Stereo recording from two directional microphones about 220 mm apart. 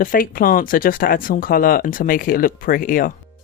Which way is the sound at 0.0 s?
40° left (ahead or behind).